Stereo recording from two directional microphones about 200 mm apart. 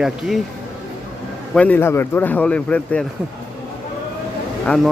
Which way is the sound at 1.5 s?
5° left (ahead or behind).